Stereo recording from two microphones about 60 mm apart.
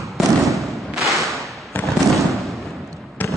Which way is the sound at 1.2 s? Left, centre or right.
Centre.